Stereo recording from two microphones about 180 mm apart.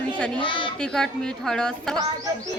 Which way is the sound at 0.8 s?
5° left (ahead or behind).